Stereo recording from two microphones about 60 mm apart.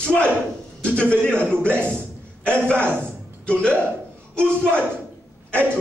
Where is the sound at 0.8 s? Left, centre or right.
Centre.